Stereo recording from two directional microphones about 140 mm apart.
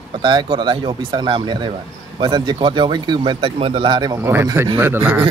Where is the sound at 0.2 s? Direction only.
35° right (ahead or behind).